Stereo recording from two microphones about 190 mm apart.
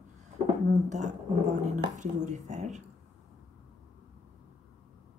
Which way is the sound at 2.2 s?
40° right (ahead or behind).